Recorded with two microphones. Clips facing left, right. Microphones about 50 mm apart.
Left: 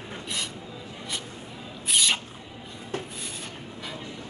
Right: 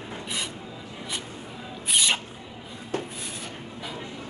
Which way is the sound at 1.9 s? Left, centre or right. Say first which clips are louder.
Even; centre.